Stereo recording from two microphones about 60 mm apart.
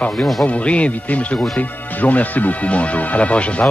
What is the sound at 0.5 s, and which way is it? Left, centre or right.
Speech, left.